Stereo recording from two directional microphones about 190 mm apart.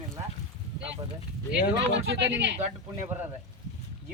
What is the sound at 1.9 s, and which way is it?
Speech, 70° right (ahead or behind).